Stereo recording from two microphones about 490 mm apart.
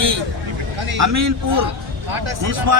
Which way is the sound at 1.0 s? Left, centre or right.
Right.